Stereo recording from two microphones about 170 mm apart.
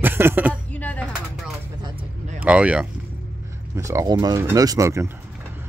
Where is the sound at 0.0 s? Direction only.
15° right (ahead or behind).